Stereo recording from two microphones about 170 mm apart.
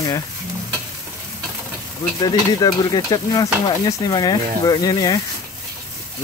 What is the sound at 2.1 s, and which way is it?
Stir, 25° left (ahead or behind).